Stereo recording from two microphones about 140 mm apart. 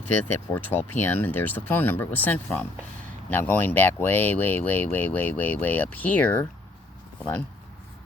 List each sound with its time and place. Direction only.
0.3 s speech: 15° left (ahead or behind)